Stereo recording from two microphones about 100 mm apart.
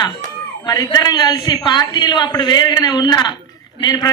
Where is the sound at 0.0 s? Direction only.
40° left (ahead or behind).